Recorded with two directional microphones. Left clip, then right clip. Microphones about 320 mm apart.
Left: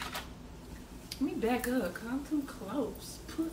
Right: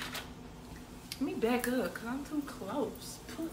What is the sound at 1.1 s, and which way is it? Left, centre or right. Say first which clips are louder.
Speech: even; centre.